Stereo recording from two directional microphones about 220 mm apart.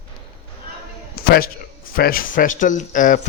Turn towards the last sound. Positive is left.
turn(degrees=35)  # may be behind; listen again after turning